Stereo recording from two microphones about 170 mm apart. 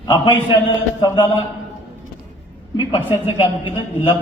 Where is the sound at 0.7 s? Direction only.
25° left (ahead or behind).